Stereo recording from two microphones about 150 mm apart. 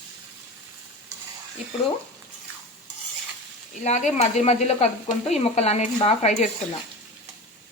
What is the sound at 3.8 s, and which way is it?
Speech, 50° left (ahead or behind).